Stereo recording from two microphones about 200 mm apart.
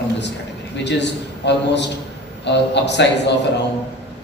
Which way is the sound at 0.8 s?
60° left (ahead or behind).